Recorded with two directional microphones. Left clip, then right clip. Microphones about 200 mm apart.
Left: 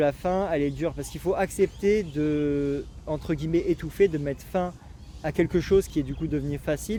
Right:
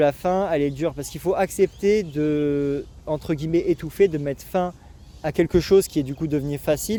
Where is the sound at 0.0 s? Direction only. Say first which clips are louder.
Right 4 dB; 40° right (ahead or behind).